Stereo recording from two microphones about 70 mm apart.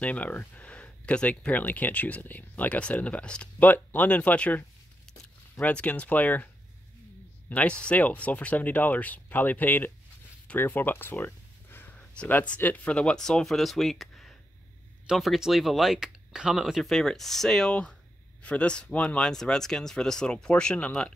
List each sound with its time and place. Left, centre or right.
0.0 s speech: left
10.5 s a sound: left
12.4 s speech: left